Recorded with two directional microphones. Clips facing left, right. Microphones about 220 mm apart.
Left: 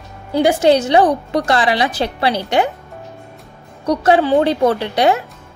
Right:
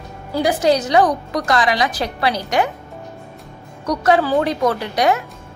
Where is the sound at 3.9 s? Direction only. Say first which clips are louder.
Left 3 dB; 30° left (ahead or behind).